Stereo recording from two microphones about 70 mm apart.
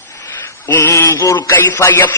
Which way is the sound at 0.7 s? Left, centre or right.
Left.